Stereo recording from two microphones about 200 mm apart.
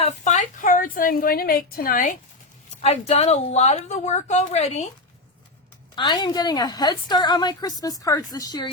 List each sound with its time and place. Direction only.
0.0 s a woman's voice: 35° left (ahead or behind)
2.8 s a woman's voice: 30° left (ahead or behind)
6.0 s a woman's voice: 20° left (ahead or behind)